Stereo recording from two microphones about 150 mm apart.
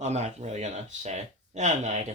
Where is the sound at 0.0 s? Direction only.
50° right (ahead or behind).